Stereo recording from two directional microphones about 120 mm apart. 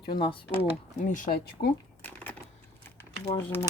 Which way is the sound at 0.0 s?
40° left (ahead or behind).